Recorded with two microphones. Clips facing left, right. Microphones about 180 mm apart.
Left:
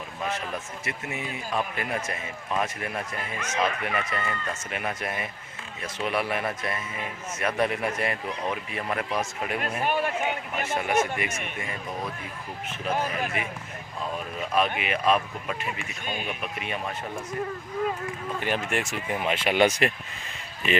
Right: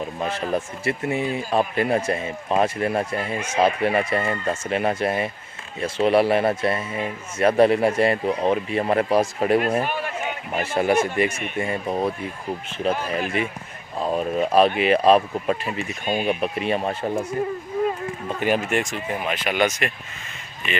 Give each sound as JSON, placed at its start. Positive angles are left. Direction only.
{"t": 0.2, "sound": "a man's voice", "side_deg": -30}
{"t": 18.3, "sound": "speech", "side_deg": -15}
{"t": 18.7, "sound": "speech", "side_deg": 5}
{"t": 19.3, "sound": "speech", "side_deg": 30}